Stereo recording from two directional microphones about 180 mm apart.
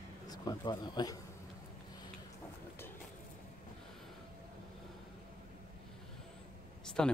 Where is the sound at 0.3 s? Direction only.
25° left (ahead or behind).